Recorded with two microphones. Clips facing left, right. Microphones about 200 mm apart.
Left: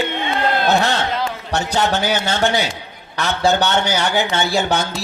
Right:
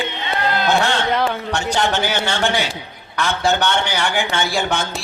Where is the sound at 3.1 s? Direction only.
35° left (ahead or behind).